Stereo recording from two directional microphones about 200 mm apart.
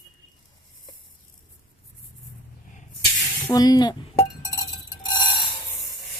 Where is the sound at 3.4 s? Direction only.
20° left (ahead or behind).